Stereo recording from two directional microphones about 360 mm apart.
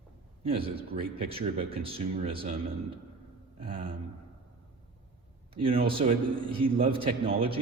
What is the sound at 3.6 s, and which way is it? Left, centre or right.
Speech, centre.